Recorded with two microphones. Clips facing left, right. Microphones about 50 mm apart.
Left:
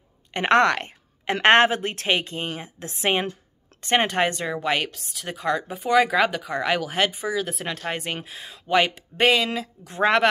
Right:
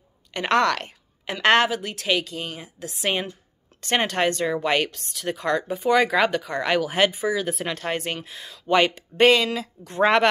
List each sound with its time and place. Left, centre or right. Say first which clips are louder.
0.3 s a woman's voice: left 2 dB; left
3.8 s speech: left 1 dB; centre
8.3 s a woman's voice: left 1 dB; centre
8.6 s speech: right 1 dB; centre